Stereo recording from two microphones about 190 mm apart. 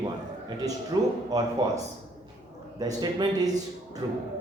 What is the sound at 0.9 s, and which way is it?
Speech, 20° right (ahead or behind).